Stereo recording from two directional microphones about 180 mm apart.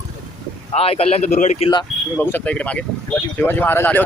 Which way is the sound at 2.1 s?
10° left (ahead or behind).